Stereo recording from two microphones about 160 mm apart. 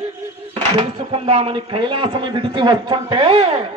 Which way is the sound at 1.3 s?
35° right (ahead or behind).